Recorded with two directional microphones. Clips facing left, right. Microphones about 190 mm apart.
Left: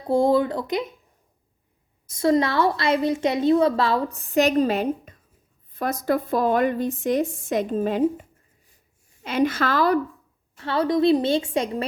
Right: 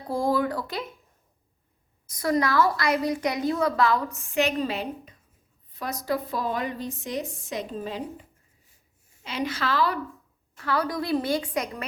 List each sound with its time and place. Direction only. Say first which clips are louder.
0.1 s a woman's voice: left 6 dB; 25° left (ahead or behind)
2.0 s a woman's voice: left 5 dB; 25° left (ahead or behind); by 10.0 s 45° left (ahead or behind)
10.6 s a woman's voice: left 7 dB; 25° left (ahead or behind)